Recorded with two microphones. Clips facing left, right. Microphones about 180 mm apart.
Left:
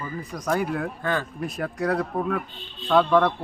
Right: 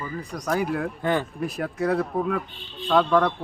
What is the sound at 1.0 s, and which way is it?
Speech, 20° right (ahead or behind).